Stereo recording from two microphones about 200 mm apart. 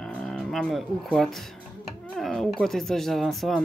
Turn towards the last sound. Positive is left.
turn(degrees=0)  # may be behind; listen again after turning